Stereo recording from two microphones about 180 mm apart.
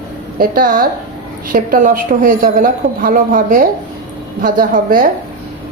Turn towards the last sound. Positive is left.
turn(degrees=-50)  # may be behind; listen again after turning